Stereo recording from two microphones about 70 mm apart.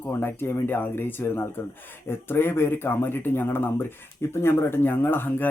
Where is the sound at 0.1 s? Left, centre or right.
Left.